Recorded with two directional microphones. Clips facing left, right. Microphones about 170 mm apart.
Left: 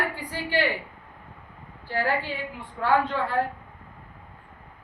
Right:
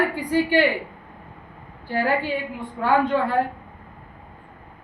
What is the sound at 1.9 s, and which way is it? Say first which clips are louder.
A woman's voice: right 4 dB; 15° right (ahead or behind).